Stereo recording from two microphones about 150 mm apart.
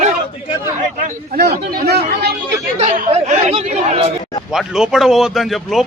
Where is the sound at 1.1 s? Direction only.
90° right.